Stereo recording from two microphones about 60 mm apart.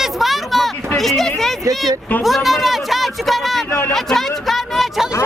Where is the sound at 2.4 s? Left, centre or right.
Centre.